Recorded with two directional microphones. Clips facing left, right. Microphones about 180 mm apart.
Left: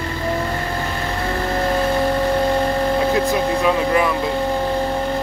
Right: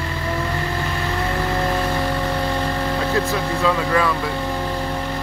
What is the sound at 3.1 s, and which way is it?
Speech, 20° left (ahead or behind).